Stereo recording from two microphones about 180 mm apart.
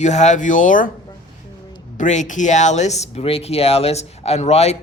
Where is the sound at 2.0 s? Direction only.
45° left (ahead or behind).